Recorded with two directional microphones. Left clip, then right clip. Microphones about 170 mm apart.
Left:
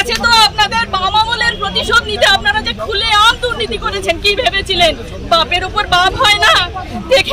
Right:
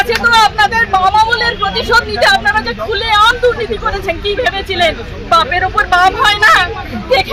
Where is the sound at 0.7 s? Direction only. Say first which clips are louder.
Right 4 dB; 40° left (ahead or behind).